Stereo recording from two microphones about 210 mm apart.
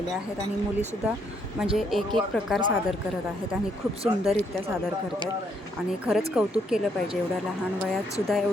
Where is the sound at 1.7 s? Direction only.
Centre (ahead or behind).